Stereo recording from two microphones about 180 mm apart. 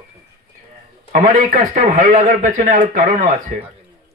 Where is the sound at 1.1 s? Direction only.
45° right (ahead or behind).